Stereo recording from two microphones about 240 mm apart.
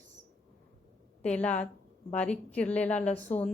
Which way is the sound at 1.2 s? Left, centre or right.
Centre.